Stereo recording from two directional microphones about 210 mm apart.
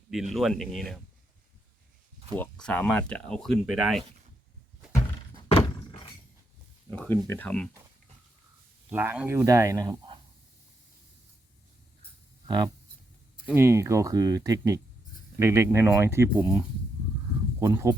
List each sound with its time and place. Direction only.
0.1 s speech: centre (ahead or behind)
2.4 s speech: 5° left (ahead or behind)
6.9 s speech: 5° left (ahead or behind)
8.9 s speech: 5° right (ahead or behind)
12.5 s speech: 20° right (ahead or behind)